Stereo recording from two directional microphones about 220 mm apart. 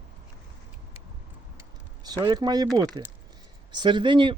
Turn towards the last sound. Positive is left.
turn(degrees=-20)  # may be behind; listen again after turning